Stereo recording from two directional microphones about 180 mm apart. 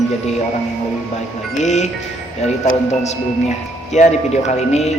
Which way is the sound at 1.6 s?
40° left (ahead or behind).